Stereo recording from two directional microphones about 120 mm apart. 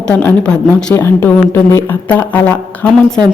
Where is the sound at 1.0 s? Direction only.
20° left (ahead or behind).